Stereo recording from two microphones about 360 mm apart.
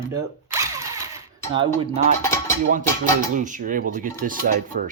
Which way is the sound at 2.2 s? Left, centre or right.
Centre.